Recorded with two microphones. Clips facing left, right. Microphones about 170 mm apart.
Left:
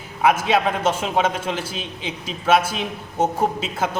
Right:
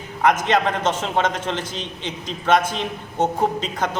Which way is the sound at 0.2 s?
5° left (ahead or behind).